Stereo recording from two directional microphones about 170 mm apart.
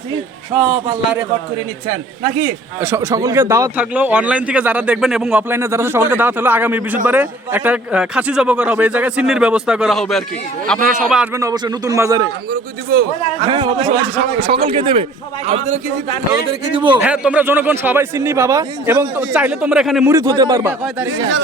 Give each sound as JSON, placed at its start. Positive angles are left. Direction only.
{"t": 1.9, "sound": "a man's voice", "side_deg": -50}
{"t": 2.8, "sound": "speech", "side_deg": -15}
{"t": 10.8, "sound": "speech", "side_deg": -55}
{"t": 11.0, "sound": "speech", "side_deg": -5}
{"t": 11.3, "sound": "speech", "side_deg": -20}
{"t": 12.5, "sound": "speech", "side_deg": -65}
{"t": 13.4, "sound": "speech", "side_deg": -30}
{"t": 16.7, "sound": "speech", "side_deg": -30}
{"t": 17.0, "sound": "speech", "side_deg": -10}
{"t": 20.1, "sound": "speech", "side_deg": -20}